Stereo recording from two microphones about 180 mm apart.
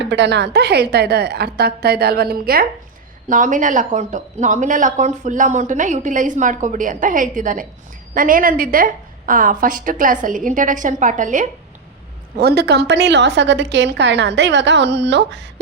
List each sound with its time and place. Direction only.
0.0 s a woman's voice: 75° right (ahead or behind); by 2.6 s 55° right (ahead or behind)
3.2 s speech: 45° right (ahead or behind)
12.4 s a woman's voice: 65° right (ahead or behind)